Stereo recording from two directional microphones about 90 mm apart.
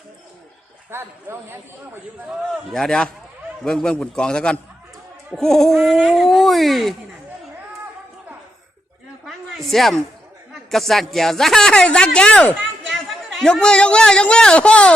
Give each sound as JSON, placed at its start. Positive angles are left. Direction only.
{"t": 0.9, "sound": "speech", "side_deg": -25}
{"t": 2.7, "sound": "a man's voice", "side_deg": 5}
{"t": 9.2, "sound": "a sound", "side_deg": 0}
{"t": 10.5, "sound": "speech", "side_deg": 5}
{"t": 12.9, "sound": "speech", "side_deg": 0}